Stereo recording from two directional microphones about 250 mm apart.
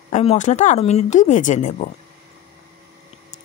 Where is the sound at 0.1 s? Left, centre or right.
Left.